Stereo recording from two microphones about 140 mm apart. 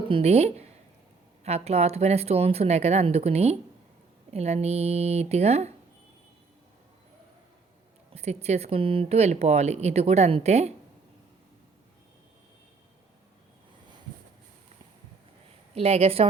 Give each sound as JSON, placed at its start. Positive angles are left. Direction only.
{"t": 0.1, "sound": "speech", "side_deg": -50}
{"t": 8.1, "sound": "speech", "side_deg": -50}
{"t": 15.7, "sound": "speech", "side_deg": -45}